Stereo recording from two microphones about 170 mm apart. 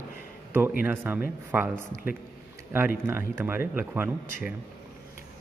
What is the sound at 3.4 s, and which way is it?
Speech, 10° right (ahead or behind).